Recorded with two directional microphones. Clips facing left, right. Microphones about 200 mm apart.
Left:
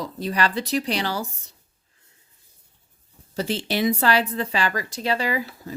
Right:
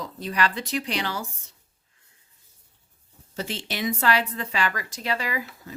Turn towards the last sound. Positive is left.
turn(degrees=30)  # may be behind; listen again after turning